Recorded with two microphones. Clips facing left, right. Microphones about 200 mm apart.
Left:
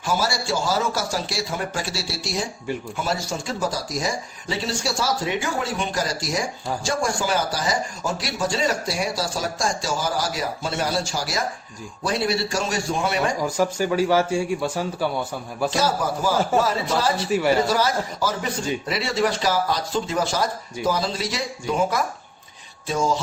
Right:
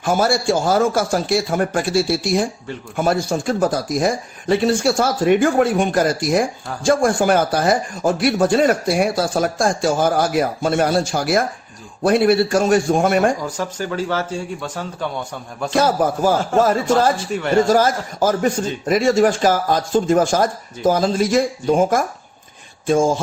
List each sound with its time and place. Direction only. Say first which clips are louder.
0.0 s speech: right 7 dB; 55° right (ahead or behind)
13.4 s speech: left 3 dB; 10° left (ahead or behind)
15.7 s speech: right 9 dB; 55° right (ahead or behind)